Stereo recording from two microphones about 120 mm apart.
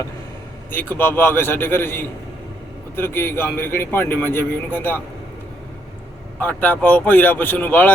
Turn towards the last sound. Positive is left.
turn(degrees=15)  # may be behind; listen again after turning